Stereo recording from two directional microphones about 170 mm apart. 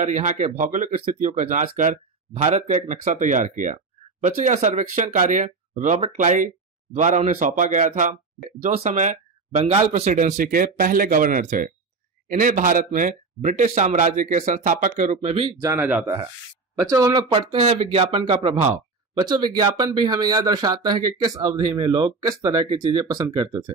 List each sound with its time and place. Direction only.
0.0 s speech: 45° right (ahead or behind)
10.0 s speech: 50° right (ahead or behind)
15.6 s speech: 15° right (ahead or behind)